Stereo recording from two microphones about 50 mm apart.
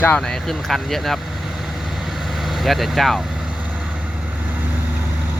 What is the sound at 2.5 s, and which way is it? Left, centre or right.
Speech, centre.